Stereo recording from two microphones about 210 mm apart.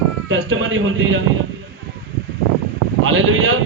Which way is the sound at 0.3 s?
70° right (ahead or behind).